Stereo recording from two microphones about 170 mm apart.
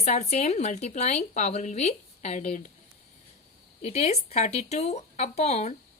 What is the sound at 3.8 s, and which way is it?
A woman's voice, 40° left (ahead or behind).